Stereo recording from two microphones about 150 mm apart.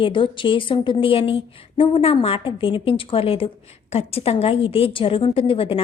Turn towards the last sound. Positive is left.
turn(degrees=40)  # may be behind; listen again after turning